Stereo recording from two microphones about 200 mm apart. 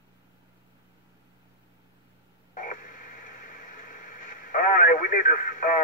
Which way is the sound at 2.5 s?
40° left (ahead or behind).